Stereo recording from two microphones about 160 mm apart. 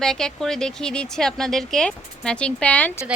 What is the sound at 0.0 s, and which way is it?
Speech, 5° left (ahead or behind).